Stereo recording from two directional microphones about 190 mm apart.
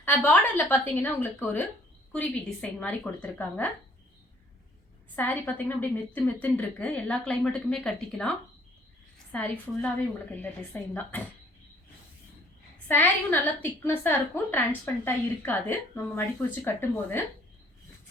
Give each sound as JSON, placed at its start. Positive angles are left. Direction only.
{"t": 0.0, "sound": "a woman's voice", "side_deg": 10}
{"t": 5.1, "sound": "a woman's voice", "side_deg": 10}
{"t": 12.9, "sound": "a woman's voice", "side_deg": 10}